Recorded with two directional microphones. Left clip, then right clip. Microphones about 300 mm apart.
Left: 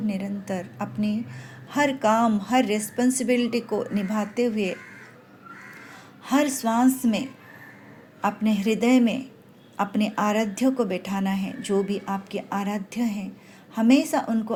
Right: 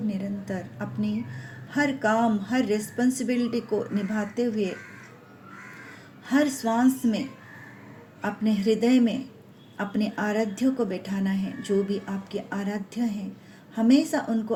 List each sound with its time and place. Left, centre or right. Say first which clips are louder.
0.1 s a sound: left 2 dB; left
1.7 s a woman's voice: left 3 dB; left
6.2 s a woman's voice: left 1 dB; left
8.2 s a woman's voice: left 3 dB; left